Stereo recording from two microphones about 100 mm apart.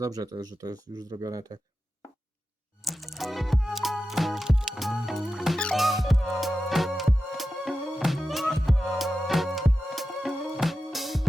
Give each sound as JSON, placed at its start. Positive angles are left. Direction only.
{"t": 0.0, "sound": "speech", "side_deg": -40}
{"t": 2.8, "sound": "music", "side_deg": 0}